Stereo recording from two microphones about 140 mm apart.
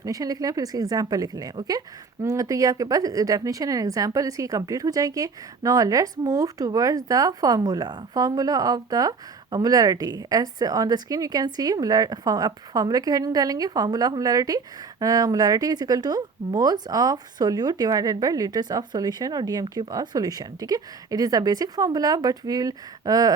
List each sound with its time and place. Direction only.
0.0 s a woman's voice: 25° right (ahead or behind)